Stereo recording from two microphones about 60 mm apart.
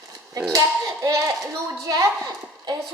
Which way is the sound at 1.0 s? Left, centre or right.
Right.